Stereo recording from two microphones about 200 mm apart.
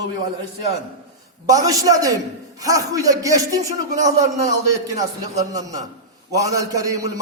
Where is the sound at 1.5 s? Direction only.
15° right (ahead or behind).